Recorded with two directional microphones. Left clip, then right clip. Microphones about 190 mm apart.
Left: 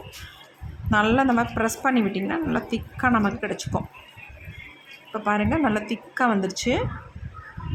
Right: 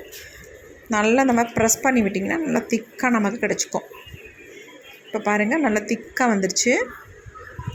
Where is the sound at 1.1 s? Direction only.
10° right (ahead or behind).